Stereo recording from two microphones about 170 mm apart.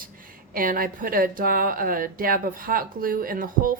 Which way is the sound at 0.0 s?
55° right (ahead or behind).